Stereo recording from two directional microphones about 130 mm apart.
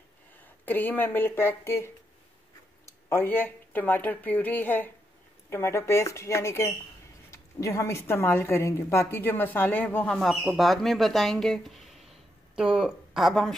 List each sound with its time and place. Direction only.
0.4 s a woman's voice: 15° left (ahead or behind)